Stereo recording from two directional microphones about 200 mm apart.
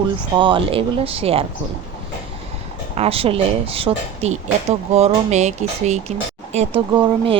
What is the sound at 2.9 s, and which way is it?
Speech, 30° right (ahead or behind).